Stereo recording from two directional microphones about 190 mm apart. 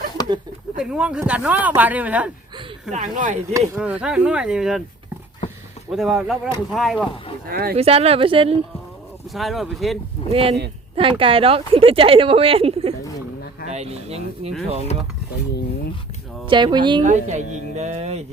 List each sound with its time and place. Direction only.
0.2 s a sound: 20° left (ahead or behind)
0.8 s speech: 5° right (ahead or behind)
2.9 s speech: 40° right (ahead or behind)
3.8 s speech: 5° right (ahead or behind)
5.9 s speech: centre (ahead or behind)
7.4 s speech: 55° right (ahead or behind)
7.8 s speech: 30° right (ahead or behind)
9.3 s speech: centre (ahead or behind)
10.3 s speech: 30° right (ahead or behind)
16.5 s speech: 25° right (ahead or behind)
17.0 s speech: 40° right (ahead or behind)